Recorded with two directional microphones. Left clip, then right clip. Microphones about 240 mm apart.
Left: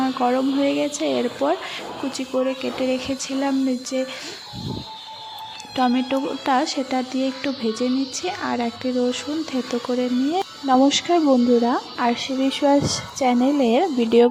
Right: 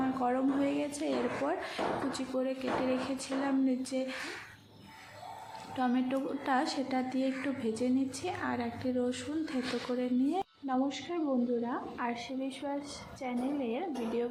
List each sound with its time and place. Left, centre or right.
0.0 s speech: left
3.9 s speech: left
5.7 s speech: left